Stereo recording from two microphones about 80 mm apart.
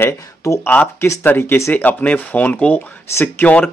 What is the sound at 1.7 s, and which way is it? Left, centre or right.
Speech, centre.